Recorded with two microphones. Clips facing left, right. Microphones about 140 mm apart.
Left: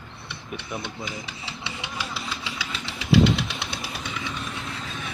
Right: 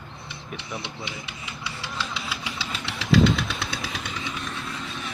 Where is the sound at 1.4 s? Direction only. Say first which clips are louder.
Right 2 dB; 25° left (ahead or behind).